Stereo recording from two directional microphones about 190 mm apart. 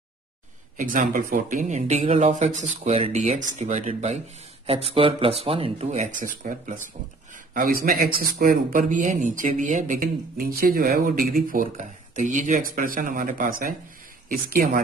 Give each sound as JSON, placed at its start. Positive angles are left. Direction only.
{"t": 0.7, "sound": "speech", "side_deg": -45}